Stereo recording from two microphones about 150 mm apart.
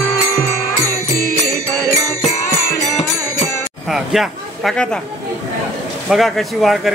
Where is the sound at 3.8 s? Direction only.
Centre (ahead or behind).